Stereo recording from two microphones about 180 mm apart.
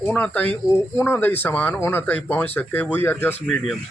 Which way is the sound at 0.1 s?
10° left (ahead or behind).